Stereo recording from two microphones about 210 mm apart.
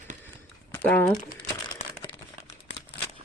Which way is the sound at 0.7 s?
10° left (ahead or behind).